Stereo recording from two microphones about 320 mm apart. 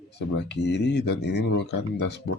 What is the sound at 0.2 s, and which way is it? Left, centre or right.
Speech, left.